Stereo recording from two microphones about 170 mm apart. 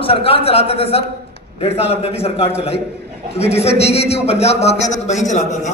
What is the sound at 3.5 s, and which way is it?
A man's voice, 35° left (ahead or behind).